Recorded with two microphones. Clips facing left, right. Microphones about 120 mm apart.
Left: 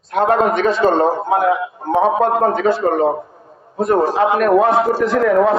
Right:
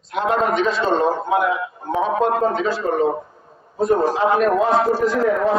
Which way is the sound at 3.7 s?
65° left (ahead or behind).